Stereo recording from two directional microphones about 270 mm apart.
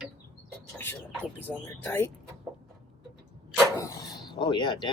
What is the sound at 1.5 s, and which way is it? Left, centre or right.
Speech, centre.